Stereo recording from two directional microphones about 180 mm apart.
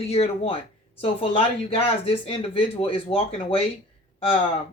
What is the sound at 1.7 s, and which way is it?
Speech, 30° left (ahead or behind).